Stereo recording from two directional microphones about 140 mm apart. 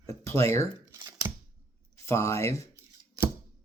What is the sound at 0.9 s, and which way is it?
Scissors, 20° right (ahead or behind).